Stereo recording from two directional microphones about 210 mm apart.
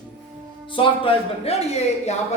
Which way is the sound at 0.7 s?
25° left (ahead or behind).